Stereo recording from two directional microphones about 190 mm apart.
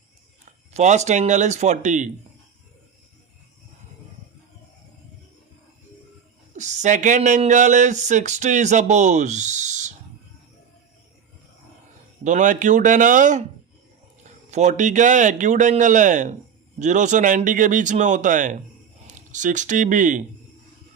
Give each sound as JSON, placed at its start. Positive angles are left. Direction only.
{"t": 0.7, "sound": "a man's voice", "side_deg": -35}
{"t": 6.5, "sound": "speech", "side_deg": -40}
{"t": 12.2, "sound": "a man's voice", "side_deg": -40}